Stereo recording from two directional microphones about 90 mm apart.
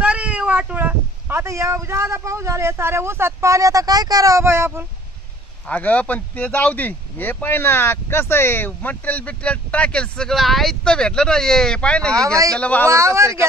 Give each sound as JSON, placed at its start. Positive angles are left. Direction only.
{"t": 0.0, "sound": "cat", "side_deg": -15}
{"t": 1.4, "sound": "speech", "side_deg": -35}
{"t": 5.7, "sound": "speech", "side_deg": 15}
{"t": 12.8, "sound": "speech", "side_deg": -30}